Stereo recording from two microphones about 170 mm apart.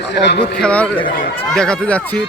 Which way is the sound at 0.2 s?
85° left.